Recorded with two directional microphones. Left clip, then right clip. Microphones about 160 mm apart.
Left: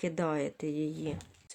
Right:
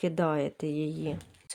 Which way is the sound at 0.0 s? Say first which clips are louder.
Right 4 dB; 35° right (ahead or behind).